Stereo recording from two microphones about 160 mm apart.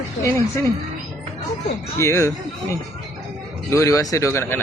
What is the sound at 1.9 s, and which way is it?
Speech, 15° left (ahead or behind).